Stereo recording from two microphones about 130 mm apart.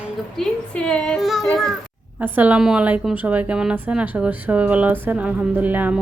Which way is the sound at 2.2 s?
15° right (ahead or behind).